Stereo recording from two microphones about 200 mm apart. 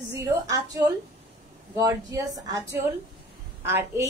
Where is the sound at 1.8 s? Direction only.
20° right (ahead or behind).